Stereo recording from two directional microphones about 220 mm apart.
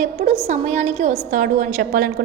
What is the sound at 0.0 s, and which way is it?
A woman's voice, 30° right (ahead or behind).